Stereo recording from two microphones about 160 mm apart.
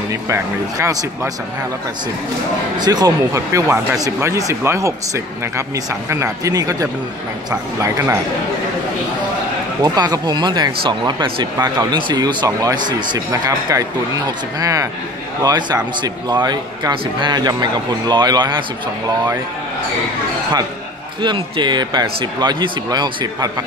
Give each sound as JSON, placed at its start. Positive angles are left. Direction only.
{"t": 0.1, "sound": "speech", "side_deg": -20}
{"t": 2.8, "sound": "speech", "side_deg": -25}
{"t": 9.8, "sound": "speech", "side_deg": -25}
{"t": 21.2, "sound": "speech", "side_deg": -30}